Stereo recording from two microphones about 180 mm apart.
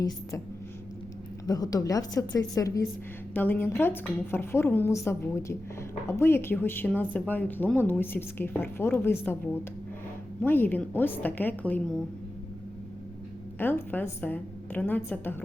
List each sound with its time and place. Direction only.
0.0 s speech: 15° left (ahead or behind)
1.5 s a woman's voice: 20° left (ahead or behind)
13.6 s speech: 10° left (ahead or behind)